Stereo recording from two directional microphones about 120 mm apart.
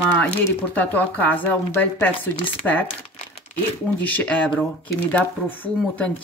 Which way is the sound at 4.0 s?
15° left (ahead or behind).